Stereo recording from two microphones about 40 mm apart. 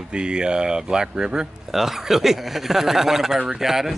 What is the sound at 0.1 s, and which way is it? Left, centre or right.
Speech, right.